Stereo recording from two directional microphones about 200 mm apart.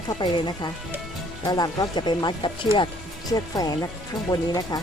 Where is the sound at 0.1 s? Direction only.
20° left (ahead or behind).